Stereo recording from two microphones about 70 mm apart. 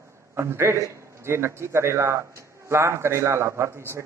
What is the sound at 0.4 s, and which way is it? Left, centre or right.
A man's voice, right.